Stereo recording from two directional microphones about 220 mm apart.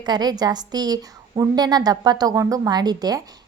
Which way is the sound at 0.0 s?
20° right (ahead or behind).